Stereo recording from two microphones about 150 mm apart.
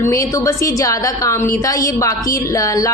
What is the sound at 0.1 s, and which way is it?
A woman's voice, 20° left (ahead or behind).